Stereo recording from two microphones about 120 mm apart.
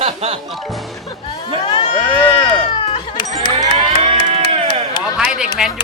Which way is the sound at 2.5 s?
40° left (ahead or behind).